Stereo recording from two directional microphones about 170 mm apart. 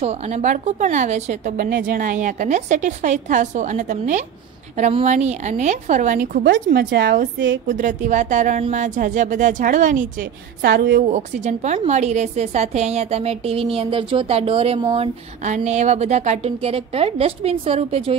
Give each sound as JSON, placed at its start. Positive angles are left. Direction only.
{"t": 0.0, "sound": "speech", "side_deg": -40}
{"t": 6.4, "sound": "speech", "side_deg": -90}
{"t": 7.6, "sound": "speech", "side_deg": -50}
{"t": 10.6, "sound": "speech", "side_deg": -90}
{"t": 11.0, "sound": "a woman's voice", "side_deg": -45}